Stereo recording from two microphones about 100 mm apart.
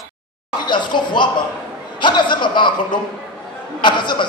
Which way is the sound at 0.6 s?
50° left (ahead or behind).